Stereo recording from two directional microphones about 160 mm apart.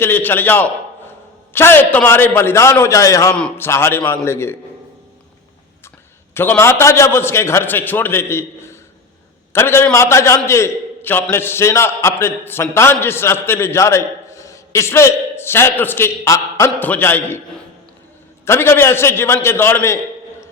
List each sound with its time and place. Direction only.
0.0 s a man's voice: 15° left (ahead or behind)
3.3 s a man's voice: 5° left (ahead or behind)
6.3 s a man's voice: 15° left (ahead or behind)
18.4 s a man's voice: 15° left (ahead or behind)